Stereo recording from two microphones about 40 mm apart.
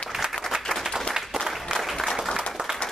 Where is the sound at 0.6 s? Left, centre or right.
Centre.